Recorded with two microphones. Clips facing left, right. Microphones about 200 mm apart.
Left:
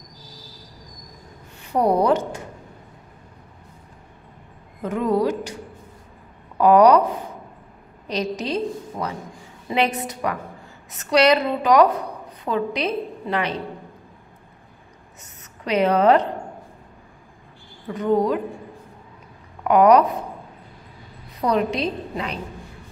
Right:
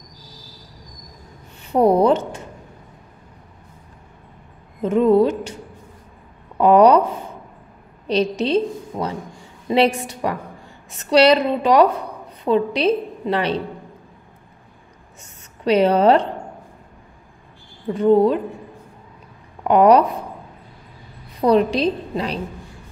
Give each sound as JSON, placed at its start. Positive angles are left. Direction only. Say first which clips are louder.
{"t": 1.7, "sound": "a woman's voice", "louder": "right 4 dB", "side_deg": -25}
{"t": 4.8, "sound": "a woman's voice", "louder": "right 6 dB", "side_deg": -25}
{"t": 6.6, "sound": "a woman's voice", "louder": "right 1 dB", "side_deg": -25}
{"t": 8.1, "sound": "a woman's voice", "louder": "right 6 dB", "side_deg": -25}
{"t": 15.6, "sound": "a woman's voice", "louder": "right 3 dB", "side_deg": -30}
{"t": 17.8, "sound": "a woman's voice", "louder": "right 5 dB", "side_deg": -30}
{"t": 19.6, "sound": "speech", "louder": "right 1 dB", "side_deg": -30}
{"t": 21.4, "sound": "a woman's voice", "louder": "right 5 dB", "side_deg": -30}